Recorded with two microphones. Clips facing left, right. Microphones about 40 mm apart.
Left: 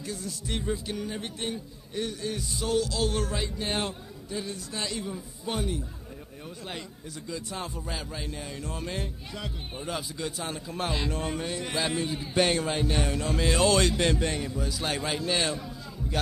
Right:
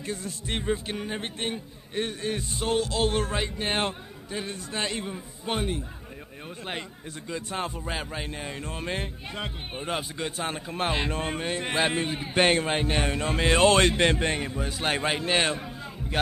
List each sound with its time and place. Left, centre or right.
0.0 s a man's voice: right
7.2 s a man's voice: right